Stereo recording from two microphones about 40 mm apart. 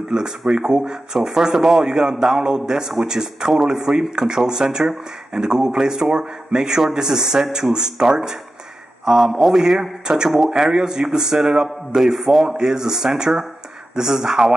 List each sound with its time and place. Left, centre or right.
0.1 s speech: centre
10.0 s speech: centre
12.4 s speech: centre